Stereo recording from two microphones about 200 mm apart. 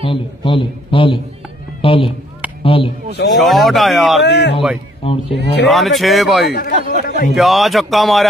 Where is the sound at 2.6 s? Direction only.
25° left (ahead or behind).